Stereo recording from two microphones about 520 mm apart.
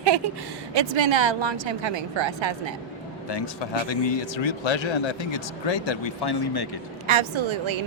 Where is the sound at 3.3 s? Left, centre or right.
Left.